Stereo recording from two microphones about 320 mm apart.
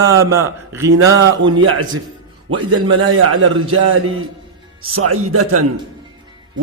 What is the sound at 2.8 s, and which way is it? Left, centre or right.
A man's voice, right.